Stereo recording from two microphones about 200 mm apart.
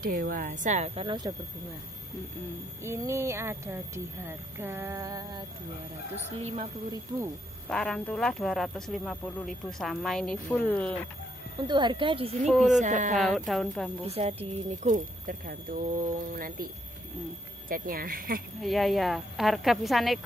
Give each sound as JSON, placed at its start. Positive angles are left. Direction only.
{"t": 0.0, "sound": "a woman's voice", "side_deg": -45}
{"t": 2.8, "sound": "speech", "side_deg": -15}
{"t": 6.3, "sound": "a woman's voice", "side_deg": -30}
{"t": 7.6, "sound": "speech", "side_deg": 5}
{"t": 11.6, "sound": "speech", "side_deg": -25}
{"t": 12.7, "sound": "a woman's voice", "side_deg": -40}
{"t": 13.1, "sound": "speech", "side_deg": 0}
{"t": 14.0, "sound": "speech", "side_deg": -30}
{"t": 18.6, "sound": "speech", "side_deg": 0}